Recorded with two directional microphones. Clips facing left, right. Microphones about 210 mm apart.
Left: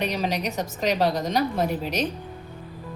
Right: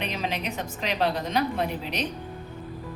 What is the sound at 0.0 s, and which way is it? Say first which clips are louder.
A woman's voice: left 4 dB; 40° left (ahead or behind).